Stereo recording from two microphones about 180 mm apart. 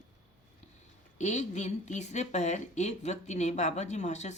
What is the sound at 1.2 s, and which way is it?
A woman's voice, 40° left (ahead or behind).